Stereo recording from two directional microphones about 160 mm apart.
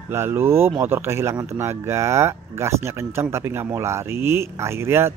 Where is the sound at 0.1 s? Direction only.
15° right (ahead or behind).